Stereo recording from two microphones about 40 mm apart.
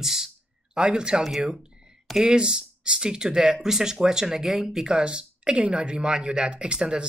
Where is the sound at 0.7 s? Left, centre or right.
Centre.